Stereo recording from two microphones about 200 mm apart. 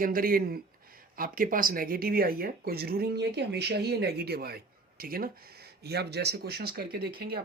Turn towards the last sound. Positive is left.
turn(degrees=-50)  # may be behind; listen again after turning